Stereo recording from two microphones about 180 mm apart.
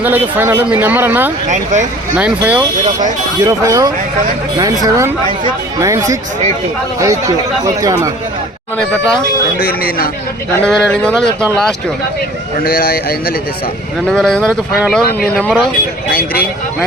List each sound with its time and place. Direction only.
0.0 s speech: 10° right (ahead or behind)
1.5 s speech: 45° right (ahead or behind)
2.1 s speech: 10° right (ahead or behind)
9.6 s a man's voice: 55° left (ahead or behind)
10.7 s speech: 5° left (ahead or behind)
12.6 s a man's voice: 55° left (ahead or behind)
14.1 s speech: 5° left (ahead or behind)
16.0 s a man's voice: 55° left (ahead or behind)